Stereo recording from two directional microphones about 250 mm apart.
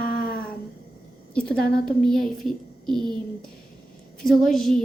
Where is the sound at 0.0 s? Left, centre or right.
Left.